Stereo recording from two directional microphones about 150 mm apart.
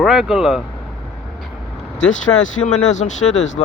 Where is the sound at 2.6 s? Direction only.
50° left (ahead or behind).